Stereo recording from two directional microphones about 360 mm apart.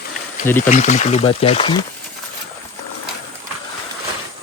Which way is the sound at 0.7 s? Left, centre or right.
Centre.